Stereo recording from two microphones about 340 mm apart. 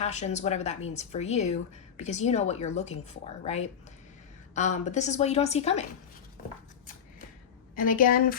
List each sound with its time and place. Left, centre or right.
0.0 s a woman's voice: centre
7.8 s a woman's voice: left